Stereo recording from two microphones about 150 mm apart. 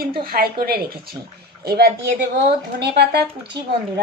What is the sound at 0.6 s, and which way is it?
A woman's voice, 90° right.